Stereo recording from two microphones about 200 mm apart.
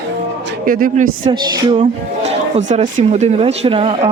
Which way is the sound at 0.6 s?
45° right (ahead or behind).